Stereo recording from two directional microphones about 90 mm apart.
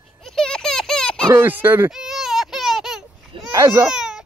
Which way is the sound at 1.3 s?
20° right (ahead or behind).